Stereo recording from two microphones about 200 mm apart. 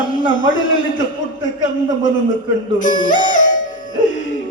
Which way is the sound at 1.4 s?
70° left (ahead or behind).